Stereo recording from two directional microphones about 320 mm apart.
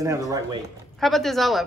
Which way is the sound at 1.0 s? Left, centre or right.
Centre.